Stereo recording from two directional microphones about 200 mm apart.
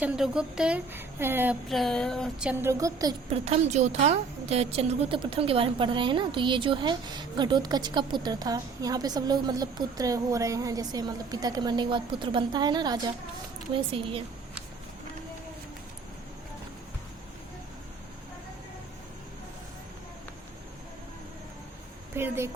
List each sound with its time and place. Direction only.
0.0 s a woman's voice: 5° right (ahead or behind)
1.7 s a woman's voice: centre (ahead or behind); by 3.2 s 15° right (ahead or behind)
3.2 s a woman's voice: 35° right (ahead or behind)
22.1 s a woman's voice: 10° right (ahead or behind)